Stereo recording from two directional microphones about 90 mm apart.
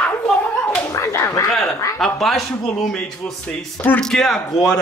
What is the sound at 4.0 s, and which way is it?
Speech, 5° left (ahead or behind).